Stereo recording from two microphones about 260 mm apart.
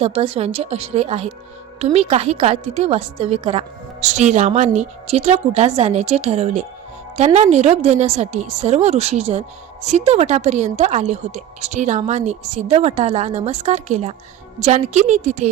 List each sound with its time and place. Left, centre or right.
0.0 s a woman's voice: right